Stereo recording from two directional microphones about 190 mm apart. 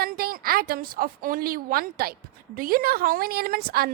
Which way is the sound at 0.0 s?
50° right (ahead or behind).